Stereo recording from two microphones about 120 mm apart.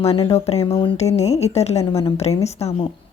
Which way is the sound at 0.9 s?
65° left (ahead or behind).